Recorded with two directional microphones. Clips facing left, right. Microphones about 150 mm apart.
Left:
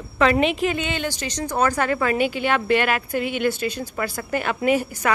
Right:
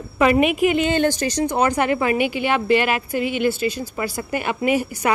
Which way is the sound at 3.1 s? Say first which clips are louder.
Right 2 dB; 50° left (ahead or behind).